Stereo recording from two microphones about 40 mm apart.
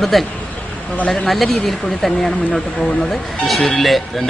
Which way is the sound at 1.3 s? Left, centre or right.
Centre.